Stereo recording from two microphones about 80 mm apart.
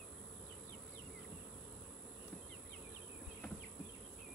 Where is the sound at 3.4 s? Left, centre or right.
Left.